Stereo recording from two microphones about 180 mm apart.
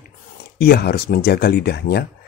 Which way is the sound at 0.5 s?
60° left (ahead or behind).